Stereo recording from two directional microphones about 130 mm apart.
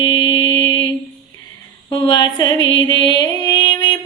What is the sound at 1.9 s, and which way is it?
Music, 35° left (ahead or behind).